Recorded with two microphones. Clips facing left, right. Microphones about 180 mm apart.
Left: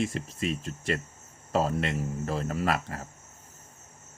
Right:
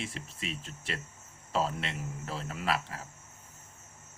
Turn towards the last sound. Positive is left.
turn(degrees=45)  # may be behind; listen again after turning